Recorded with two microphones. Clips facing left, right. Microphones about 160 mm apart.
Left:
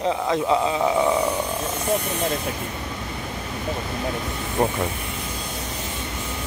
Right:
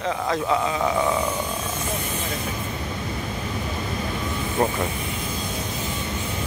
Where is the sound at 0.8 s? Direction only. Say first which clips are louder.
Left 2 dB; 15° left (ahead or behind).